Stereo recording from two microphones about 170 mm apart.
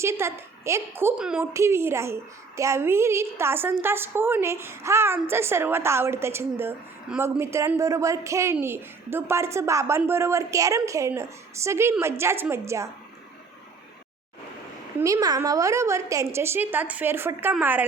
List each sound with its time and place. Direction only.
0.0 s speech: 15° right (ahead or behind)
14.9 s speech: 20° right (ahead or behind)